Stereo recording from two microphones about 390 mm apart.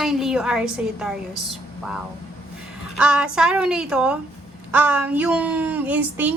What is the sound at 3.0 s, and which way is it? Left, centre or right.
A woman's voice, centre.